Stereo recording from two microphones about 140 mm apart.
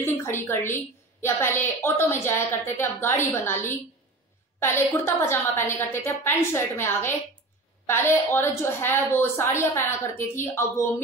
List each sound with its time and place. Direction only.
0.0 s a woman's voice: 20° left (ahead or behind)